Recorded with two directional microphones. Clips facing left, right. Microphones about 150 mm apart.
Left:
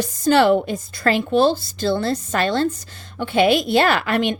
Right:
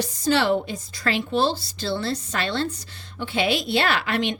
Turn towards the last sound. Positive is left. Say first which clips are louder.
# left 5 dB
turn(degrees=50)  # may be behind; listen again after turning